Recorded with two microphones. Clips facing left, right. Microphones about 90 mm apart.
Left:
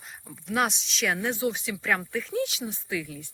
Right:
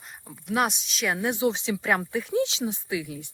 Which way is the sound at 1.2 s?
15° right (ahead or behind).